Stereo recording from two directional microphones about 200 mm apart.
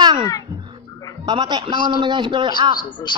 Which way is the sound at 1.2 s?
20° right (ahead or behind).